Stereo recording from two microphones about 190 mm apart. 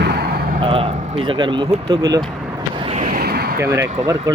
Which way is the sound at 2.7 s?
30° right (ahead or behind).